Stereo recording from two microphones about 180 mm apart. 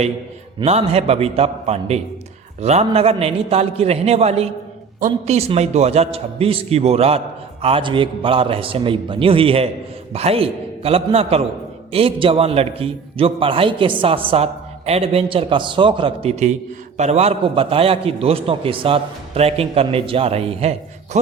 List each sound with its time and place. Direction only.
0.6 s a man's voice: 35° right (ahead or behind)